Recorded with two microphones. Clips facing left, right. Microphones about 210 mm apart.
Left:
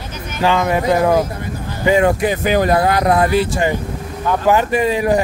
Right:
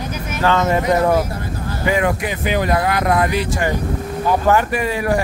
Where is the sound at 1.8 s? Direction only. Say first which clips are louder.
Left 5 dB; 30° left (ahead or behind).